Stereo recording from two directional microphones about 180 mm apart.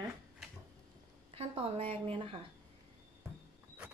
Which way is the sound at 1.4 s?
35° right (ahead or behind).